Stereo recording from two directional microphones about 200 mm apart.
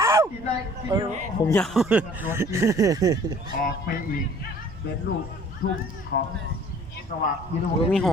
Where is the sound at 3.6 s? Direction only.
50° left (ahead or behind).